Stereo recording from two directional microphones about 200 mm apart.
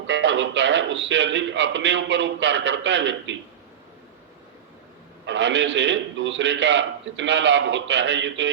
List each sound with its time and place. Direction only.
0.1 s a man's voice: 65° right (ahead or behind)
5.2 s a man's voice: 65° right (ahead or behind)